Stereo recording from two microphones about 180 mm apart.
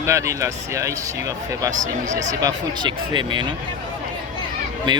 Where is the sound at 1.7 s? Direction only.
45° right (ahead or behind).